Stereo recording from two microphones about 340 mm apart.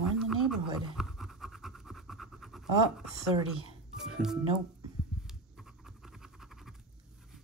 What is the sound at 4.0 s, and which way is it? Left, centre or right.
Speech, centre.